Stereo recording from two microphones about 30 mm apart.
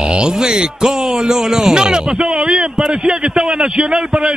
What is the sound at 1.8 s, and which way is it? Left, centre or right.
A man's voice, right.